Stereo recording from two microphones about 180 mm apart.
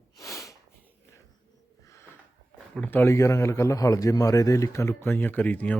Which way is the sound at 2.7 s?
10° left (ahead or behind).